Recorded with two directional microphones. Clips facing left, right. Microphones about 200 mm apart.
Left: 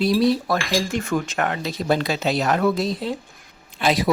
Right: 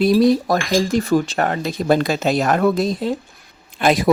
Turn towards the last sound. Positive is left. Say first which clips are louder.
# right 4 dB
turn(degrees=-50)  # may be behind; listen again after turning